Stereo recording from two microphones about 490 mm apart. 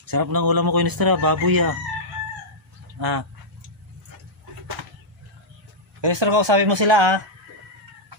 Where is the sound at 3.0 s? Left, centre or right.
Right.